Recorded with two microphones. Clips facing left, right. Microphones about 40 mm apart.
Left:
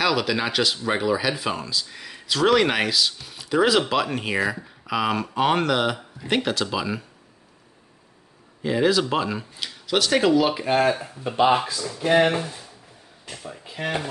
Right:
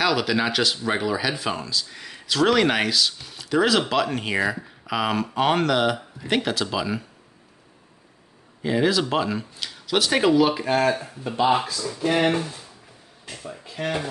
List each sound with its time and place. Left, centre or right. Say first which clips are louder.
0.0 s speech: right 1 dB; centre
8.6 s speech: left 1 dB; centre
10.5 s speech: left 1 dB; centre
12.0 s speech: left 2 dB; left